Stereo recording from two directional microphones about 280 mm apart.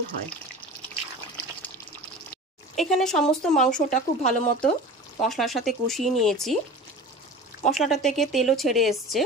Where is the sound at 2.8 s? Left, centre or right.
Centre.